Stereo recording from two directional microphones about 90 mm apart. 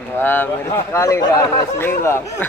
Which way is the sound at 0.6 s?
30° left (ahead or behind).